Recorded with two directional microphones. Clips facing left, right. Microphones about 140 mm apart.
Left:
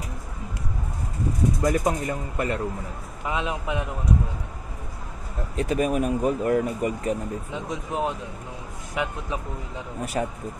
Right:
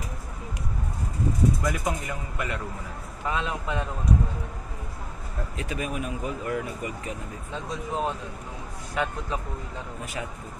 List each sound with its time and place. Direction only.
1.6 s speech: 30° left (ahead or behind)
3.3 s a man's voice: 15° left (ahead or behind)
5.6 s speech: 40° left (ahead or behind)
7.5 s a man's voice: 15° left (ahead or behind)
10.2 s speech: 40° left (ahead or behind)